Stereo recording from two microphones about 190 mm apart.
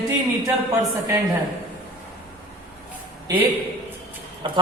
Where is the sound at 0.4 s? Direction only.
15° right (ahead or behind).